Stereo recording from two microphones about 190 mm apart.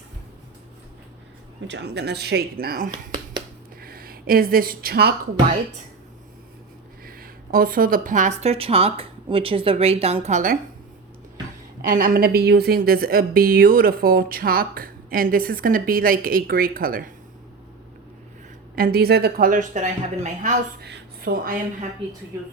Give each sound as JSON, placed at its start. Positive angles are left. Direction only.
{"t": 1.6, "sound": "speech", "side_deg": -65}
{"t": 7.0, "sound": "speech", "side_deg": -50}
{"t": 11.8, "sound": "a woman's voice", "side_deg": -45}
{"t": 18.8, "sound": "a woman's voice", "side_deg": -50}
{"t": 20.8, "sound": "speech", "side_deg": -55}